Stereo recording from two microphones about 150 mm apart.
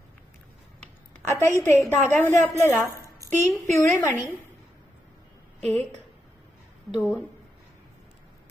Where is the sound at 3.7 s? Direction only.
15° left (ahead or behind).